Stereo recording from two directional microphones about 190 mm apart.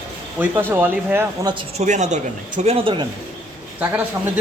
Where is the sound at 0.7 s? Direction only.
10° right (ahead or behind).